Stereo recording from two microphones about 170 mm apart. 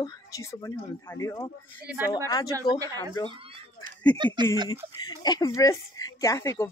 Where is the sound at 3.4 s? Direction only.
30° right (ahead or behind).